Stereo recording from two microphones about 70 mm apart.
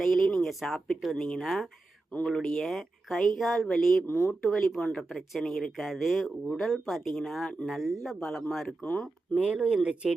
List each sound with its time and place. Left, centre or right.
0.0 s speech: centre
4.1 s speech: left
4.4 s speech: centre
9.4 s speech: centre